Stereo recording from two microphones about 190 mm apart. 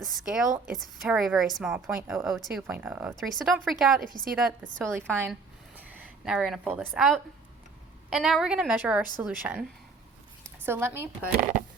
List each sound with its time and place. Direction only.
0.0 s speech: centre (ahead or behind)
5.3 s a sound: 10° right (ahead or behind)
8.1 s speech: centre (ahead or behind)
10.7 s speech: 15° right (ahead or behind)